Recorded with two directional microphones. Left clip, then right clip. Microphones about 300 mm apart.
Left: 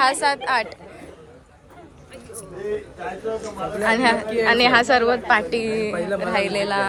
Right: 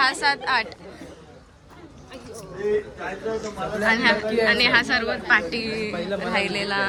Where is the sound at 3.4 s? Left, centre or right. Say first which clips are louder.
Left 1 dB; centre.